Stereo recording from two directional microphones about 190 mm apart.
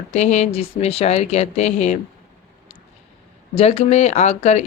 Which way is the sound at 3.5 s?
30° left (ahead or behind).